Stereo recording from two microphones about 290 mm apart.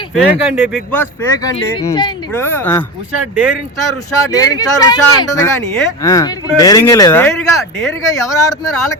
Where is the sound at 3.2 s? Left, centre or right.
Centre.